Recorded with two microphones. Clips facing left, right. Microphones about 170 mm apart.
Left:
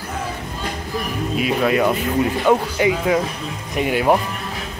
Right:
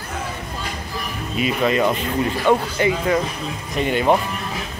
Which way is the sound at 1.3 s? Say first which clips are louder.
Left 1 dB; centre (ahead or behind).